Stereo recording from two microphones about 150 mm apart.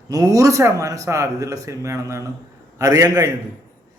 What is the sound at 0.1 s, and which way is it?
A man's voice, 25° right (ahead or behind).